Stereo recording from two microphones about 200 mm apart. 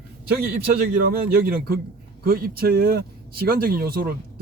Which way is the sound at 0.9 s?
45° right (ahead or behind).